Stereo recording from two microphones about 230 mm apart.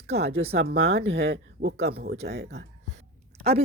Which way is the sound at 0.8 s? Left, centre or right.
Right.